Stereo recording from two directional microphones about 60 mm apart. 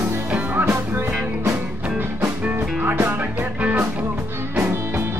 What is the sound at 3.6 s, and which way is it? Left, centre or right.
Music, right.